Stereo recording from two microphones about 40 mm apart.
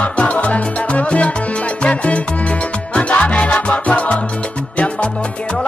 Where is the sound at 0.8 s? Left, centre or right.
Left.